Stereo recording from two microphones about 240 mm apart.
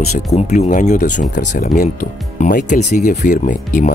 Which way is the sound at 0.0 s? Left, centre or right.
Left.